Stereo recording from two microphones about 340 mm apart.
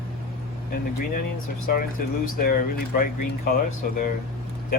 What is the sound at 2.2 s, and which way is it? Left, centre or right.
Speech, left.